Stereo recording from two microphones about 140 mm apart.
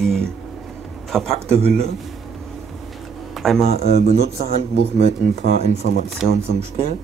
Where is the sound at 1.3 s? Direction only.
45° right (ahead or behind).